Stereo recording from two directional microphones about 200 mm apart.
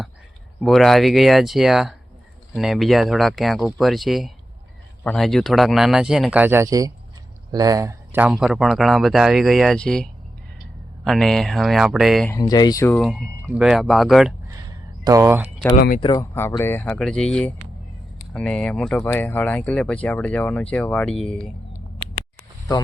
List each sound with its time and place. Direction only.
0.6 s speech: centre (ahead or behind)
12.3 s speech: 20° left (ahead or behind)
13.0 s speech: centre (ahead or behind)
15.0 s speech: 15° right (ahead or behind)
16.0 s speech: 20° left (ahead or behind); by 21.5 s 5° left (ahead or behind)